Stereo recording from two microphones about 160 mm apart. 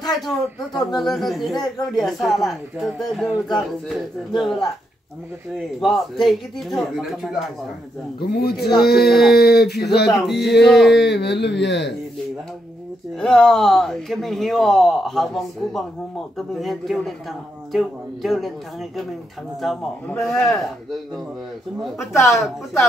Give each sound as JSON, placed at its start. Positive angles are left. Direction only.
{"t": 0.9, "sound": "speech", "side_deg": 0}
{"t": 5.8, "sound": "speech", "side_deg": 0}
{"t": 8.2, "sound": "speech", "side_deg": 75}
{"t": 8.5, "sound": "speech", "side_deg": 0}
{"t": 8.8, "sound": "speech", "side_deg": 75}
{"t": 10.0, "sound": "speech", "side_deg": 0}
{"t": 11.0, "sound": "speech", "side_deg": 90}
{"t": 13.2, "sound": "speech", "side_deg": 5}
{"t": 19.6, "sound": "speech", "side_deg": 0}
{"t": 22.2, "sound": "speech", "side_deg": 0}